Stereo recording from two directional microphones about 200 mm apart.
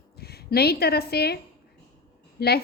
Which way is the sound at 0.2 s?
50° left (ahead or behind).